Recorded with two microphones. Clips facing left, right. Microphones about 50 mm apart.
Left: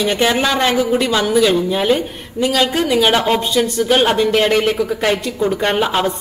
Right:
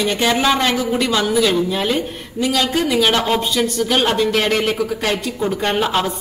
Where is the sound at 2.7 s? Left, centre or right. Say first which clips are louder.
Left 2 dB; centre.